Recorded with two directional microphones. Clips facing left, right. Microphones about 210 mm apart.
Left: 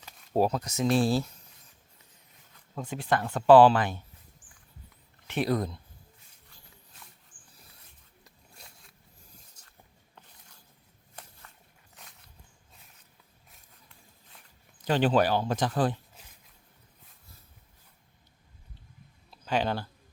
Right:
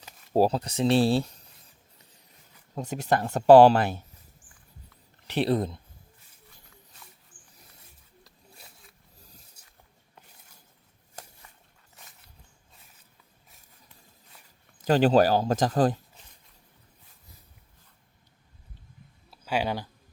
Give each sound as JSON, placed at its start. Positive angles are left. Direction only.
{"t": 0.3, "sound": "speech", "side_deg": -35}
{"t": 2.7, "sound": "speech", "side_deg": -40}
{"t": 5.3, "sound": "speech", "side_deg": -30}
{"t": 8.5, "sound": "a sound", "side_deg": 0}
{"t": 14.8, "sound": "speech", "side_deg": -40}
{"t": 19.3, "sound": "speech", "side_deg": -10}